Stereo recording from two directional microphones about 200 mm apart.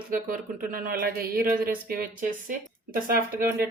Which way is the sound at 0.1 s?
45° right (ahead or behind).